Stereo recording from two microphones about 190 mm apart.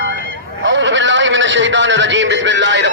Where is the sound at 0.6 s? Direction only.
75° right (ahead or behind).